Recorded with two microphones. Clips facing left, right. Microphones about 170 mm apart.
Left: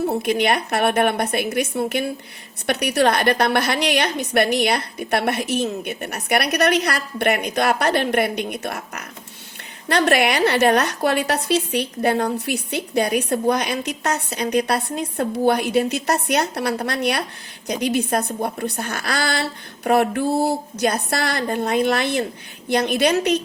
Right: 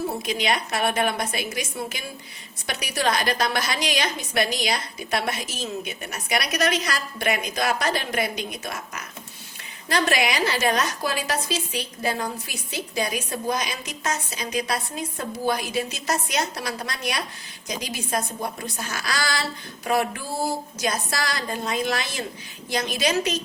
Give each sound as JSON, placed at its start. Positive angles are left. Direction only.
{"t": 0.0, "sound": "a woman's voice", "side_deg": 60}